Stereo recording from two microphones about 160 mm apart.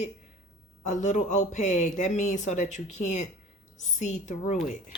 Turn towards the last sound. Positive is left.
turn(degrees=50)  # may be behind; listen again after turning